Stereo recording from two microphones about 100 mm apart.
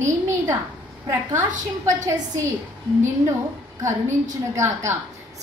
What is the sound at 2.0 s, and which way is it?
Speech, 35° right (ahead or behind).